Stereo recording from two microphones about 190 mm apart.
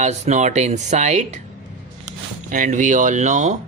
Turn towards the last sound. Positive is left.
turn(degrees=-40)  # may be behind; listen again after turning